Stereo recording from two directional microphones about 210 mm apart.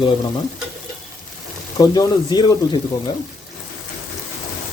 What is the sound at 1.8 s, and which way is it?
Speech, 15° left (ahead or behind).